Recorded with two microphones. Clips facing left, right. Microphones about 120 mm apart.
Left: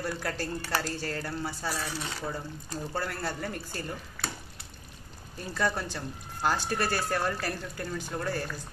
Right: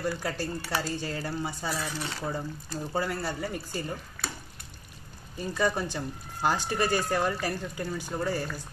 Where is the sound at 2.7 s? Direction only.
10° right (ahead or behind).